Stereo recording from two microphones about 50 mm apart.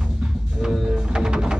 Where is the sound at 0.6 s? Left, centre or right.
Centre.